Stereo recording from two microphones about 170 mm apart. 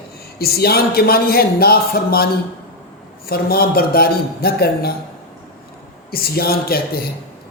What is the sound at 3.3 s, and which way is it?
Speech, 60° left (ahead or behind).